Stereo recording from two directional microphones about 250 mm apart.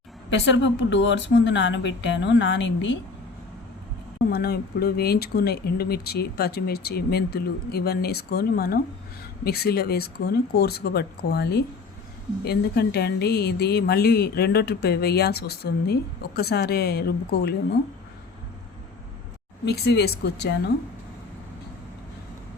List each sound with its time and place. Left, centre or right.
0.3 s a woman's voice: left
4.3 s a woman's voice: left
19.6 s a woman's voice: left